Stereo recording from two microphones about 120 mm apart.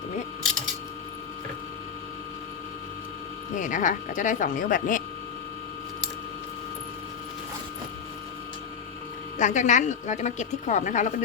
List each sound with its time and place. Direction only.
3.6 s a woman's voice: 90° left
9.4 s a woman's voice: 90° left